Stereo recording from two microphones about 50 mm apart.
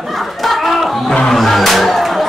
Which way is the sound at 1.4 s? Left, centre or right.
Centre.